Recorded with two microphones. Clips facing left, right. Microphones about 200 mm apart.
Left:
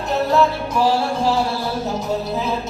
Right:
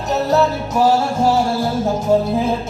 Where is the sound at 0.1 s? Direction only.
40° right (ahead or behind).